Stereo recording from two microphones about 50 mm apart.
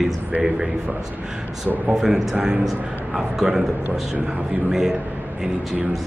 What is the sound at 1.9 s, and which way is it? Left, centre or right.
Speech, centre.